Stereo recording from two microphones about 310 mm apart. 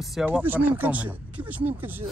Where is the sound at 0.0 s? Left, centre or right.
Centre.